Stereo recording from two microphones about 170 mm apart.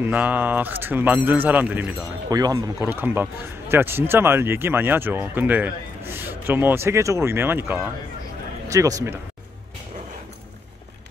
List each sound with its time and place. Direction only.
0.0 s speech: 10° right (ahead or behind)
2.2 s speech: 20° right (ahead or behind)